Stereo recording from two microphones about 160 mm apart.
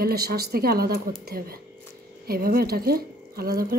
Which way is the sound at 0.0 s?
70° right (ahead or behind).